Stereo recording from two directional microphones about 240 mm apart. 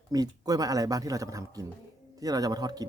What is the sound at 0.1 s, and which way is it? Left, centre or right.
Speech, centre.